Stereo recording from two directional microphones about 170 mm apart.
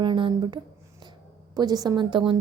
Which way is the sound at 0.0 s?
30° right (ahead or behind).